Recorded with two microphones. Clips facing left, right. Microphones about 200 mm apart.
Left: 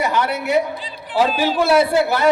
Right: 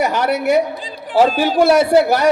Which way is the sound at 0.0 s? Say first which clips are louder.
Right 4 dB; 45° right (ahead or behind).